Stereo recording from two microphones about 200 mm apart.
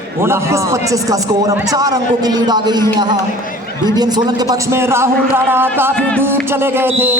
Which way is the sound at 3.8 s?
20° right (ahead or behind).